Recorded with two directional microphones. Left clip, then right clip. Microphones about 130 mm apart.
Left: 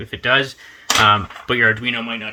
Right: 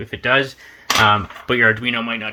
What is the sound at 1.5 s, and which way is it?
Speech, 5° right (ahead or behind).